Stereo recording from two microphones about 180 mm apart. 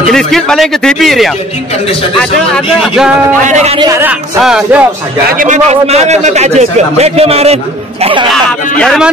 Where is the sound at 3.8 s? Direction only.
15° right (ahead or behind).